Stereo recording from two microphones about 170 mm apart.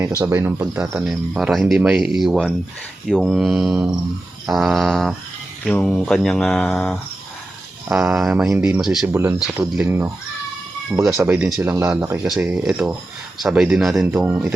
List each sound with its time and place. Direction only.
0.2 s speech: 15° right (ahead or behind)
9.1 s speech: 15° right (ahead or behind)
9.4 s speech: 5° right (ahead or behind)
9.8 s speech: 15° right (ahead or behind)
11.1 s speech: 15° right (ahead or behind)